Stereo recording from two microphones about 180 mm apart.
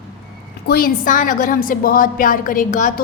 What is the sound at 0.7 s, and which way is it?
A woman's voice, 50° left (ahead or behind).